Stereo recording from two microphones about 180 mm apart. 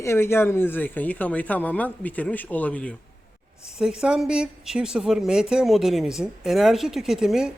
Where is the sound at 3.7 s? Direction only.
5° right (ahead or behind).